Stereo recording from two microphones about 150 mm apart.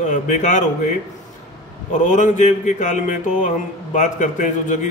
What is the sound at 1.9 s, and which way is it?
Mantra, 55° left (ahead or behind).